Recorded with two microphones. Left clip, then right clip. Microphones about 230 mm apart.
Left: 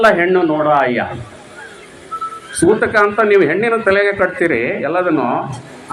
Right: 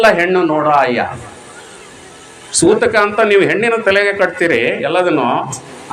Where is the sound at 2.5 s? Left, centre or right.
Centre.